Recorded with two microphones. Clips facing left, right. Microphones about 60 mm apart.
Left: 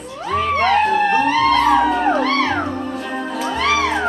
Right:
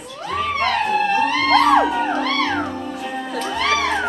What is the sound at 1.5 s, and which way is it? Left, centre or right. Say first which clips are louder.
Music: right 3 dB; right.